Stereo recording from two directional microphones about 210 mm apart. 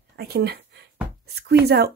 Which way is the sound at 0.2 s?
50° right (ahead or behind).